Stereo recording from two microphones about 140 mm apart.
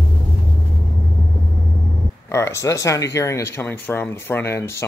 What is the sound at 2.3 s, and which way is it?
Speech, 20° left (ahead or behind).